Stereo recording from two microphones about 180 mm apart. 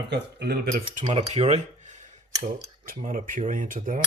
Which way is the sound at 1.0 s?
35° right (ahead or behind).